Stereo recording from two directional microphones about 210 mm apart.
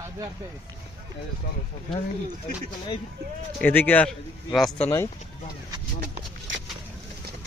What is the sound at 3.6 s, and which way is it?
A man's voice, 10° left (ahead or behind).